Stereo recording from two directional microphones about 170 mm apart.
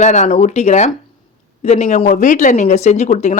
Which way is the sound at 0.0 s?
45° left (ahead or behind).